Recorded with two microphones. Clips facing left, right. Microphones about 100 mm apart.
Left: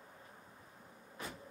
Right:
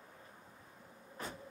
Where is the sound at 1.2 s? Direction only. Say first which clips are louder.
Right 1 dB; 35° right (ahead or behind).